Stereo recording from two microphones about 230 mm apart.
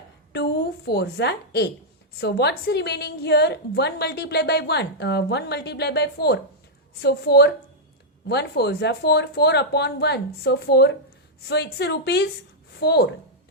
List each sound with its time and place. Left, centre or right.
0.3 s a woman's voice: left